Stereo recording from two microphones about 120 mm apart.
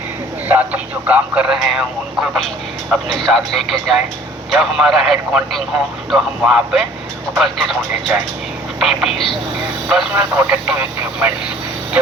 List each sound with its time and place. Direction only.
0.4 s speech: 15° right (ahead or behind)
2.9 s speech: centre (ahead or behind)
10.2 s speech: 20° right (ahead or behind)